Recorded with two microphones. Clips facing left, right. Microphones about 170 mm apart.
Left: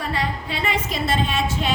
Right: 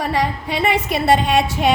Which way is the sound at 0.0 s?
70° right (ahead or behind).